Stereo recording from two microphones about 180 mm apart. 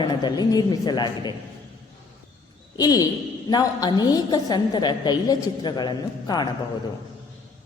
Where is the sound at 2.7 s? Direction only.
20° left (ahead or behind).